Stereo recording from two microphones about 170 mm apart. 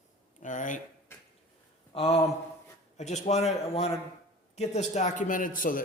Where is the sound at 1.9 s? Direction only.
35° left (ahead or behind).